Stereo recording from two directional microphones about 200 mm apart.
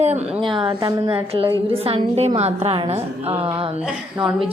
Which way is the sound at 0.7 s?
20° right (ahead or behind).